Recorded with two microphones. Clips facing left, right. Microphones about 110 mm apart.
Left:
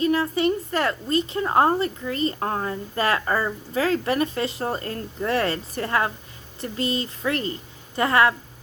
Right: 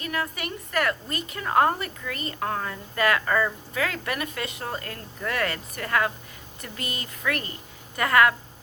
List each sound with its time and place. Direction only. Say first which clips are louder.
0.0 s a woman's voice: left 10 dB; 30° left (ahead or behind)